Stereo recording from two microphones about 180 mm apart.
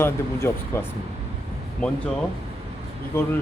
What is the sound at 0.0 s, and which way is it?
Speech, 15° left (ahead or behind).